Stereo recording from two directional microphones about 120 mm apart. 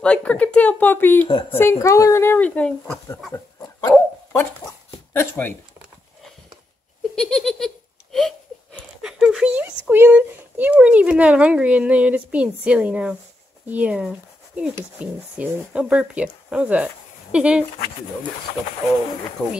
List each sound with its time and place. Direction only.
0.0 s speech: 10° left (ahead or behind)
3.9 s dog: 15° left (ahead or behind)
5.1 s speech: 20° left (ahead or behind)
7.2 s giggle: 5° left (ahead or behind)
8.7 s speech: 5° right (ahead or behind)
19.4 s speech: 10° left (ahead or behind)